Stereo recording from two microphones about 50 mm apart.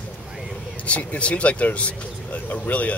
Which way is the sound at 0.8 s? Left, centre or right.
Left.